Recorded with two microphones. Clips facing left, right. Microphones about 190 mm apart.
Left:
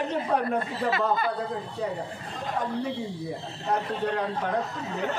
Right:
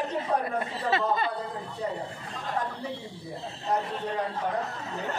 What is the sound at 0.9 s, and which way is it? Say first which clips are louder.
Speech: right 1 dB; 25° right (ahead or behind).